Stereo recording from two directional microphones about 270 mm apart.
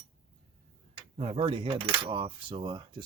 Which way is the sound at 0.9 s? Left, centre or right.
Right.